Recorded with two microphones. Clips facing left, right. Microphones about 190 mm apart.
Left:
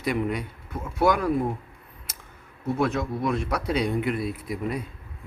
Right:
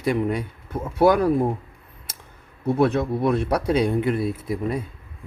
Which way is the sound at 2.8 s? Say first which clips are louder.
Right 5 dB; 30° right (ahead or behind).